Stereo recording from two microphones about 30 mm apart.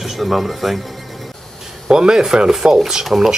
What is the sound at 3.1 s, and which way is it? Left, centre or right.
Speech, right.